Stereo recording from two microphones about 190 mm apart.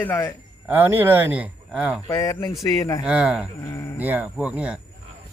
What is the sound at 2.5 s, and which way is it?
Speech, centre (ahead or behind).